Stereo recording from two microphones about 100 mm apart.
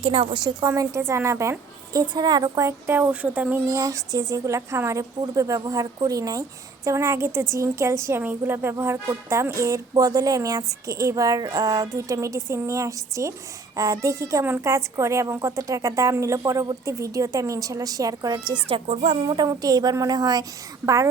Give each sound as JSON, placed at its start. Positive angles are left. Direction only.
{"t": 0.0, "sound": "a child's voice", "side_deg": -75}
{"t": 0.3, "sound": "a woman's voice", "side_deg": -45}
{"t": 0.7, "sound": "a woman's voice", "side_deg": -30}
{"t": 3.7, "sound": "a woman's voice", "side_deg": -35}
{"t": 18.7, "sound": "a child's voice", "side_deg": -80}
{"t": 19.5, "sound": "speech", "side_deg": -40}